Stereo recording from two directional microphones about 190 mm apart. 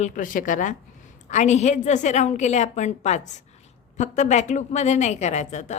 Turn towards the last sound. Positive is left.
turn(degrees=35)  # may be behind; listen again after turning